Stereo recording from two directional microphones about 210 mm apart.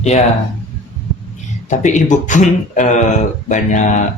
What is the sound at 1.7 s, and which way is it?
Speech, 35° left (ahead or behind).